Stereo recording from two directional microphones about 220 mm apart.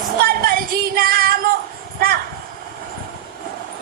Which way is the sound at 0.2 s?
40° right (ahead or behind).